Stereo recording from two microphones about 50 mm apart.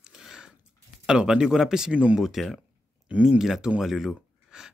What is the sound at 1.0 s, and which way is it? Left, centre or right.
Speech, centre.